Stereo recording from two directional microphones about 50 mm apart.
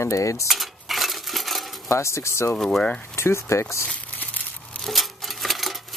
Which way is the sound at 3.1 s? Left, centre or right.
Left.